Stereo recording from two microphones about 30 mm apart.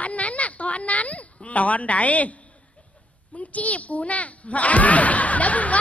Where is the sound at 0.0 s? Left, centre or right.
Left.